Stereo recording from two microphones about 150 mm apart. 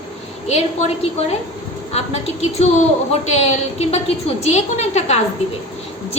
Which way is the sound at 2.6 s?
45° left (ahead or behind).